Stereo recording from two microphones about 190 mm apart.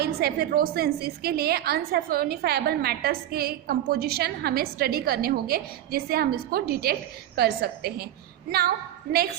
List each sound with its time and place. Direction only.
0.0 s a woman's voice: 55° right (ahead or behind)